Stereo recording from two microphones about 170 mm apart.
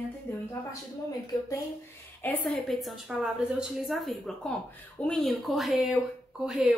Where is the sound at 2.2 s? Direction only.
10° left (ahead or behind).